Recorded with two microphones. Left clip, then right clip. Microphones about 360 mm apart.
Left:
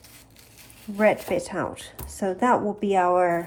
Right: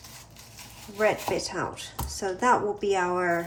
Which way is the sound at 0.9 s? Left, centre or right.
Centre.